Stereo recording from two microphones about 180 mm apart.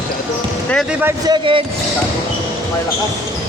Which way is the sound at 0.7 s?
Centre (ahead or behind).